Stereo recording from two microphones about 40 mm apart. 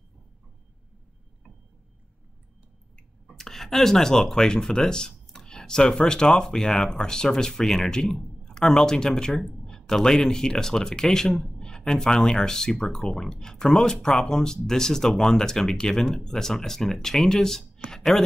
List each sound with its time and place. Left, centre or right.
3.3 s speech: centre